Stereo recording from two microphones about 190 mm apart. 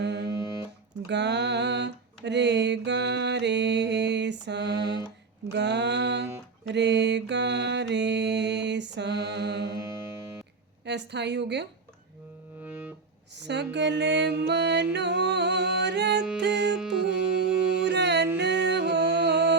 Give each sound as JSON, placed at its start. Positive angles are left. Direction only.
{"t": 0.0, "sound": "music", "side_deg": -65}
{"t": 0.3, "sound": "music", "side_deg": -15}
{"t": 1.0, "sound": "a sound", "side_deg": -65}
{"t": 5.5, "sound": "music", "side_deg": -65}
{"t": 6.7, "sound": "mantra", "side_deg": -65}
{"t": 9.7, "sound": "music", "side_deg": -15}
{"t": 10.8, "sound": "music", "side_deg": -65}
{"t": 12.6, "sound": "music", "side_deg": -10}
{"t": 13.3, "sound": "music", "side_deg": -65}
{"t": 16.5, "sound": "music", "side_deg": 0}
{"t": 17.8, "sound": "music", "side_deg": -60}